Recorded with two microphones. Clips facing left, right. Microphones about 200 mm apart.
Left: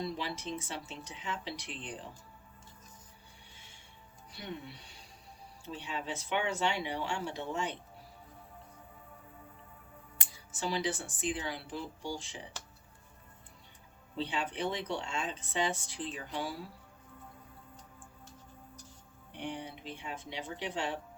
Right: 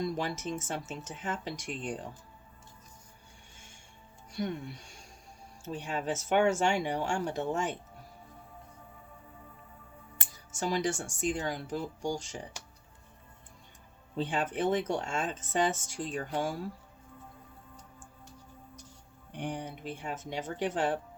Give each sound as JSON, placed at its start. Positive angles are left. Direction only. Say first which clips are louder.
{"t": 0.0, "sound": "speech", "louder": "right 4 dB", "side_deg": -45}
{"t": 3.5, "sound": "music", "louder": "right 2 dB", "side_deg": -45}
{"t": 4.3, "sound": "speech", "louder": "right 8 dB", "side_deg": -45}
{"t": 10.5, "sound": "speech", "louder": "right 3 dB", "side_deg": -45}
{"t": 14.2, "sound": "speech", "louder": "right 4 dB", "side_deg": -45}
{"t": 19.3, "sound": "speech", "louder": "right 3 dB", "side_deg": -45}